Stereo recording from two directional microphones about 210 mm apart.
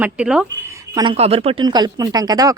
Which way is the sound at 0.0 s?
5° right (ahead or behind).